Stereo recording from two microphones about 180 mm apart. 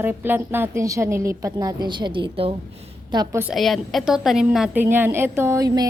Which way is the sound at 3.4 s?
Centre (ahead or behind).